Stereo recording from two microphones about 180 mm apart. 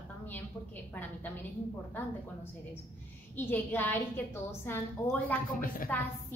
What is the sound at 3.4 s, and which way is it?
A woman's voice, 10° left (ahead or behind).